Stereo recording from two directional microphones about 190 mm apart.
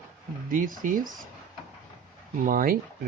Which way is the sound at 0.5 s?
45° right (ahead or behind).